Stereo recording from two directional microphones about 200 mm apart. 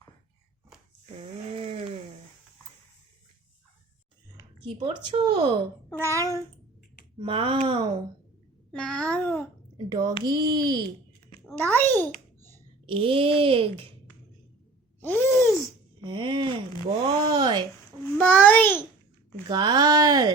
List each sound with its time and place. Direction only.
1.0 s a sound: 30° right (ahead or behind)
5.0 s speech: 20° right (ahead or behind)
6.0 s child singing: 15° right (ahead or behind)
7.2 s speech: 25° right (ahead or behind)
8.7 s a child's voice: 5° left (ahead or behind)
9.7 s speech: 20° right (ahead or behind)
11.5 s a sound: 10° left (ahead or behind)
12.8 s speech: 25° right (ahead or behind)
15.0 s groan: 10° left (ahead or behind)
16.0 s speech: 25° right (ahead or behind)
18.0 s a child's voice: 10° left (ahead or behind)
19.5 s speech: 20° right (ahead or behind)